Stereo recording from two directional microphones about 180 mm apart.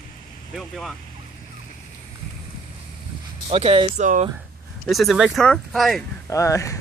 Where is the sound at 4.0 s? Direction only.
40° right (ahead or behind).